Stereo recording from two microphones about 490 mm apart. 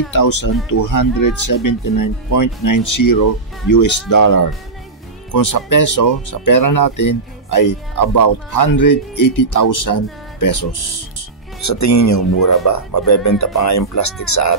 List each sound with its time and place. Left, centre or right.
0.1 s speech: left